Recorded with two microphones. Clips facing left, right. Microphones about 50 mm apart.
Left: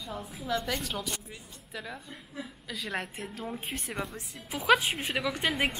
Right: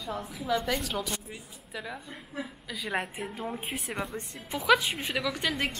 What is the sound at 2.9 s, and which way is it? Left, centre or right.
A woman's voice, centre.